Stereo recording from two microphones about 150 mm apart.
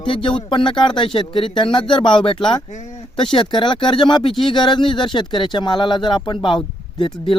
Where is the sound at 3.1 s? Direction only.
35° left (ahead or behind).